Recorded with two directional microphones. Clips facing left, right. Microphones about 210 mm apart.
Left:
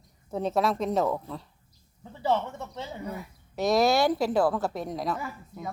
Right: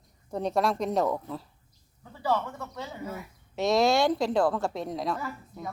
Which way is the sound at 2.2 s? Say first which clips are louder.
Left 2 dB; 25° left (ahead or behind).